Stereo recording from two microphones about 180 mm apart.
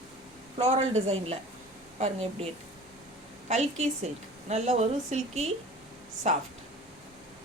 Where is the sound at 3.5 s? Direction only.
35° right (ahead or behind).